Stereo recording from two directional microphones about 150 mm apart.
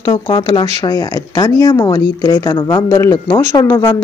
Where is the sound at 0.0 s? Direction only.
30° left (ahead or behind).